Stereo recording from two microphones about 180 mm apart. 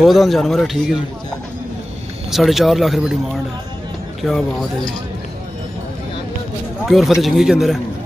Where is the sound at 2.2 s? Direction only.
Centre (ahead or behind).